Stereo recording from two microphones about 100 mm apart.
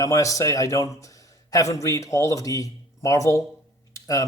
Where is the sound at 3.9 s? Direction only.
35° left (ahead or behind).